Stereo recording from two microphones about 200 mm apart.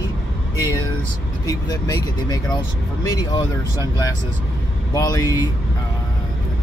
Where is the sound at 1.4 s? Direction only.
20° left (ahead or behind).